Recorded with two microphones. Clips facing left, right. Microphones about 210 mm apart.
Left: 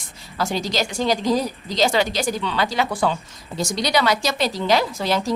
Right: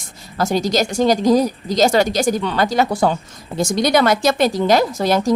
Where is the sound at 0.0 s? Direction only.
45° right (ahead or behind).